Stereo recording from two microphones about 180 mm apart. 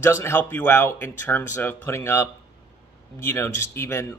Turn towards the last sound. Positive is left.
turn(degrees=15)  # may be behind; listen again after turning